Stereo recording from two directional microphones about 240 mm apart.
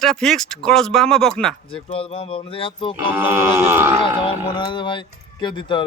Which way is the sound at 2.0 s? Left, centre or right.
Left.